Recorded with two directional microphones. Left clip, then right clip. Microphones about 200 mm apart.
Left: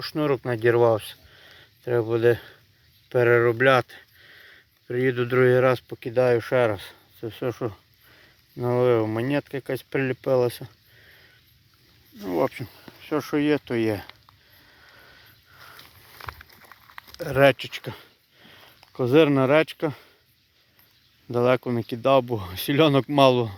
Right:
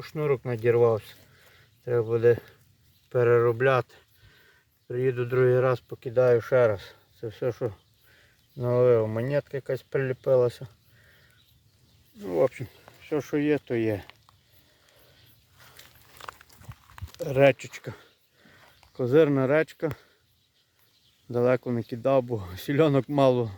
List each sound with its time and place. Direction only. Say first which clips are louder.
0.0 s speech: left 3 dB; 10° left (ahead or behind)
12.2 s speech: even; 5° left (ahead or behind)
15.8 s a sound: even; 30° left (ahead or behind)
17.2 s speech: left 2 dB; centre (ahead or behind)
21.2 s speech: left 3 dB; 5° left (ahead or behind)